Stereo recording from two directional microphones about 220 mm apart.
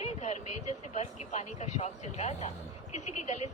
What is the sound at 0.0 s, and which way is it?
Speech, 30° left (ahead or behind).